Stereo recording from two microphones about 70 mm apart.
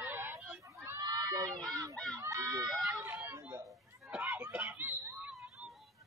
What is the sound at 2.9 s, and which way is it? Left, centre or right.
Speech, right.